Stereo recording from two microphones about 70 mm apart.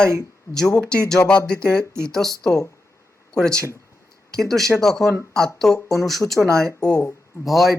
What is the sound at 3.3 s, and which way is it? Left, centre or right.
Speech, centre.